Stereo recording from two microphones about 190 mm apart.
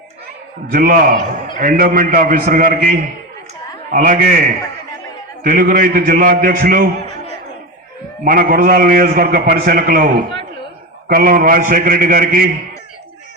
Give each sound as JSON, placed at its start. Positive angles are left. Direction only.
{"t": 0.7, "sound": "a man's voice", "side_deg": -50}
{"t": 8.2, "sound": "a man's voice", "side_deg": -50}
{"t": 11.1, "sound": "a man's voice", "side_deg": -50}